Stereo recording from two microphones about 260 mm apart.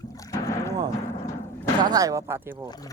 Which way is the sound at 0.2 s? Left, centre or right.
Centre.